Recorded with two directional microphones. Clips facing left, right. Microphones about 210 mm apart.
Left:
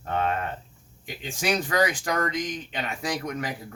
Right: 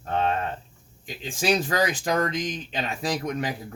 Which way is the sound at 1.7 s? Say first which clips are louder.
Even; 25° right (ahead or behind).